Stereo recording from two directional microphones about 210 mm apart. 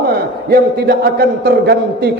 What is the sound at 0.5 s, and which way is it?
A man's voice, 50° right (ahead or behind).